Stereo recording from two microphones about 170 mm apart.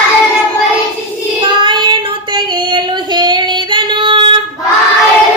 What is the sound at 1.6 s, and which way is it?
Child singing, 30° right (ahead or behind).